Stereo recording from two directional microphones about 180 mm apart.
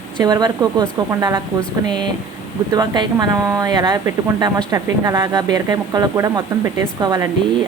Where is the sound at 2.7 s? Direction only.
25° right (ahead or behind).